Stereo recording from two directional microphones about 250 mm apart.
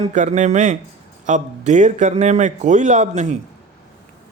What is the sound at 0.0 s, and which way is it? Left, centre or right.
A man's voice, right.